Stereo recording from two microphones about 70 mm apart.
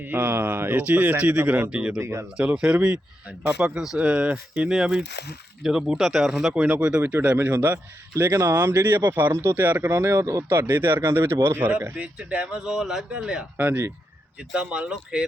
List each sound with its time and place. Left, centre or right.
0.0 s a man's voice: right
2.0 s speech: right
2.4 s a man's voice: centre
8.3 s speech: right
10.5 s a man's voice: right
11.9 s speech: centre
12.5 s speech: centre
13.6 s speech: right
14.3 s speech: centre